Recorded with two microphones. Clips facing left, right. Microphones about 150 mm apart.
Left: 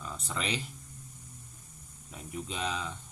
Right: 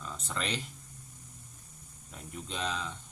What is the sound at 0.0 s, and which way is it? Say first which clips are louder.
Speech: left 1 dB; 5° left (ahead or behind).